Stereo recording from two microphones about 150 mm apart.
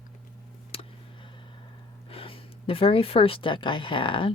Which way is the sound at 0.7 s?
40° left (ahead or behind).